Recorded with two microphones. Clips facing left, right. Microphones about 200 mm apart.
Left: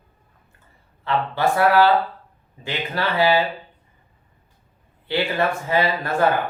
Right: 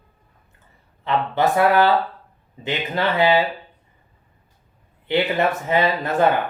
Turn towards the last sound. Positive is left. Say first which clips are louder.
# right 2 dB
turn(degrees=-20)  # may be behind; listen again after turning